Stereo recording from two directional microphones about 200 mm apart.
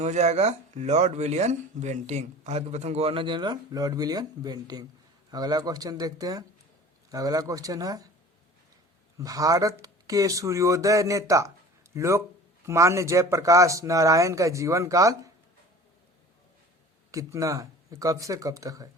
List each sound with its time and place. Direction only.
0.0 s speech: 35° right (ahead or behind); by 8.0 s 20° right (ahead or behind)
9.1 s speech: 15° right (ahead or behind)
17.1 s speech: 15° right (ahead or behind)